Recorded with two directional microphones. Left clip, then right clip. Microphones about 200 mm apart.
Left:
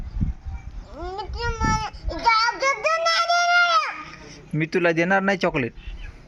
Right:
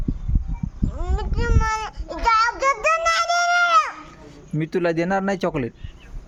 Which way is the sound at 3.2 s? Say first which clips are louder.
Even; 10° right (ahead or behind).